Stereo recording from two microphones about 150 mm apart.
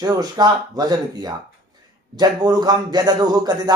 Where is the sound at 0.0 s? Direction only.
25° right (ahead or behind).